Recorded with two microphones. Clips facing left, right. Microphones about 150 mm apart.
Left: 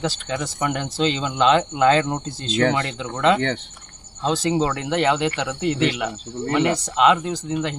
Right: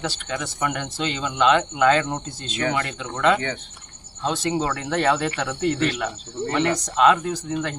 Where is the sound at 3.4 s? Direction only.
75° left (ahead or behind).